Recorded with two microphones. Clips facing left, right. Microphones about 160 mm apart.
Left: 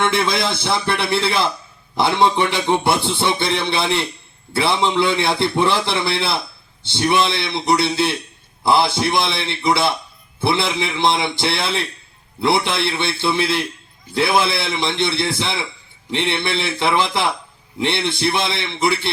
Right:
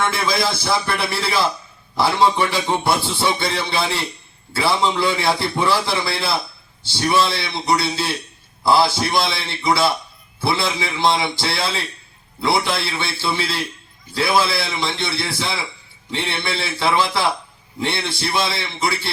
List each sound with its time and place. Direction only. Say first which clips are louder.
0.1 s a man's voice: left 1 dB; 25° left (ahead or behind)